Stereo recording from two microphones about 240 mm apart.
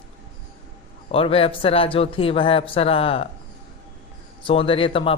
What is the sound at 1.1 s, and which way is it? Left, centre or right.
Speech, left.